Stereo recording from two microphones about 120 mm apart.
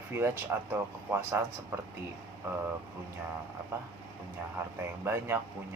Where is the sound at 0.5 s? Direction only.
20° right (ahead or behind).